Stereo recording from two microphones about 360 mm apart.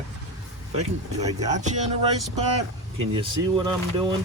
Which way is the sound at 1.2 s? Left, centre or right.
Centre.